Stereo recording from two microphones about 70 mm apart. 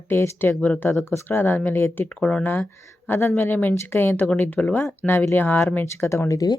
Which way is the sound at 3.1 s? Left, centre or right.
Left.